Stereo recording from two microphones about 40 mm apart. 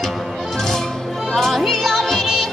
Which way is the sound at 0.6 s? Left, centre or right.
Centre.